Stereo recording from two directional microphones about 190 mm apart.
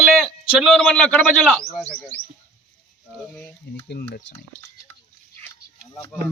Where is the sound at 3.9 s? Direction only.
55° left (ahead or behind).